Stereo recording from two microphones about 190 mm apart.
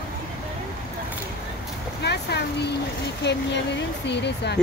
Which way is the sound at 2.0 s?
60° left (ahead or behind).